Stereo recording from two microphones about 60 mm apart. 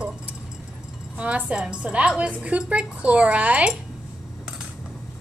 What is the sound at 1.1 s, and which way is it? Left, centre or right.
A woman's voice, right.